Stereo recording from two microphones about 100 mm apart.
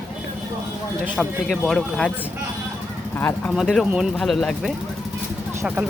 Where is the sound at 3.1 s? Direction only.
20° left (ahead or behind).